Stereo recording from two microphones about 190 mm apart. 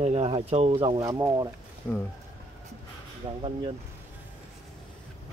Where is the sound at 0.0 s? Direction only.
30° right (ahead or behind).